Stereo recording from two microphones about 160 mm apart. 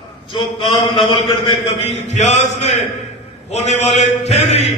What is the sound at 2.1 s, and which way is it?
Mantra, 45° left (ahead or behind).